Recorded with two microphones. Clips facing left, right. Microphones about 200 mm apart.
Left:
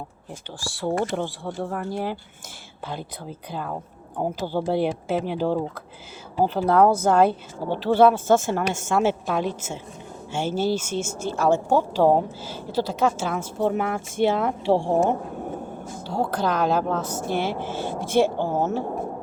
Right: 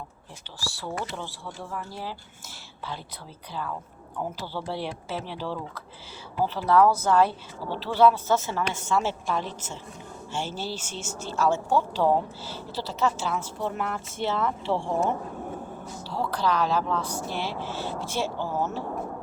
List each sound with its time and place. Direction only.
0.6 s speech: 50° left (ahead or behind)
3.5 s a woman's voice: 50° left (ahead or behind)
9.4 s a woman's voice: 10° left (ahead or behind)
10.3 s a woman's voice: 50° left (ahead or behind)
18.8 s speech: 25° left (ahead or behind)